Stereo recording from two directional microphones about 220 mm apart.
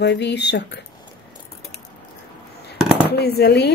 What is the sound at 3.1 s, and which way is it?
Speech, 45° left (ahead or behind).